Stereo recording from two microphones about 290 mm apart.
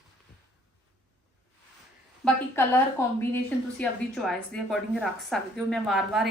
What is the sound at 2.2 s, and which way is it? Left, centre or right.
A woman's voice, centre.